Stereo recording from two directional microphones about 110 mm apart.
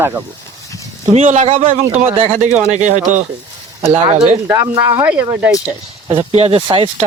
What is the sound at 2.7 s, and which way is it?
Speech, 90° right.